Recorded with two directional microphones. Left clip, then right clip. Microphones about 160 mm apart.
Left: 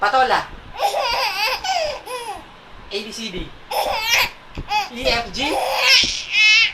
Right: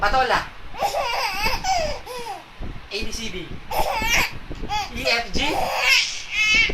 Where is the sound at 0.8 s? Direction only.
10° left (ahead or behind).